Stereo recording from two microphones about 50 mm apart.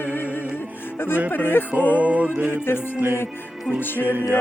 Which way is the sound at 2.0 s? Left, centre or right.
Right.